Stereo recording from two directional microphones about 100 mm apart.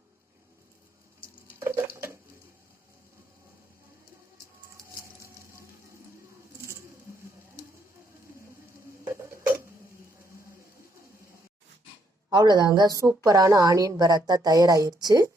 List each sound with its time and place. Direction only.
1.5 s water: 25° right (ahead or behind)
12.3 s a woman's voice: 45° right (ahead or behind)